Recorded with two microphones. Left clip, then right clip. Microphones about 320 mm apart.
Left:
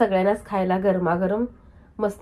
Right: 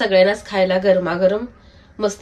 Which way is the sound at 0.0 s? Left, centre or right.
Centre.